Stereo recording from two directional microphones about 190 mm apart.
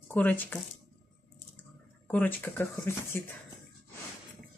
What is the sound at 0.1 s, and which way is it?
Speech, 10° left (ahead or behind).